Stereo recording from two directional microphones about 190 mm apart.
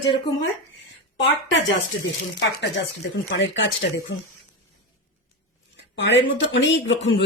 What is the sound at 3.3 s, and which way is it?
Speech, 65° left (ahead or behind).